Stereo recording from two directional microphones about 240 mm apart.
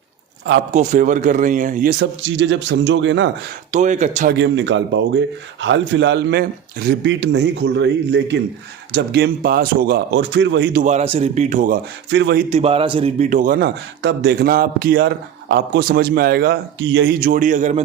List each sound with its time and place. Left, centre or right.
0.7 s a man's voice: right
3.7 s speech: right
4.4 s a man's voice: right
12.1 s a man's voice: right
12.5 s a man's voice: right